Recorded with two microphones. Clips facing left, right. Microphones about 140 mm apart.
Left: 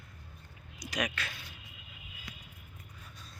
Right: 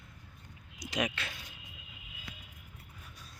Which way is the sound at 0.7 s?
25° right (ahead or behind).